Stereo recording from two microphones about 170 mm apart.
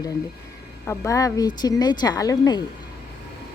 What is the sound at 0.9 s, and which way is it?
Speech, 20° left (ahead or behind).